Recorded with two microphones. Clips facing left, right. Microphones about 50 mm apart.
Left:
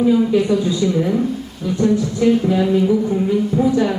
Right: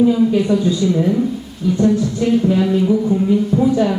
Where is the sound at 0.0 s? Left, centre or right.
Centre.